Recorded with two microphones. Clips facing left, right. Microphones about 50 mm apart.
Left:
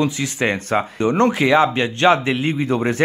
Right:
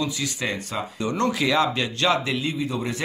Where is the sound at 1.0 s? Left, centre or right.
Left.